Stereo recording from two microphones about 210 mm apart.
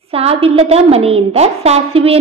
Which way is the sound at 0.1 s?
30° right (ahead or behind).